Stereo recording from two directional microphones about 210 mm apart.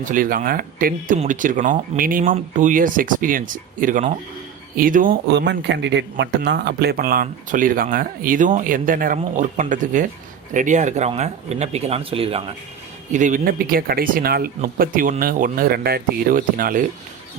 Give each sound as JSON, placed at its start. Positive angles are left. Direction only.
{"t": 0.0, "sound": "speech", "side_deg": -40}